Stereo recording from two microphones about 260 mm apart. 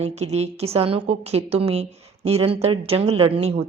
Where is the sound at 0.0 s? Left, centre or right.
Right.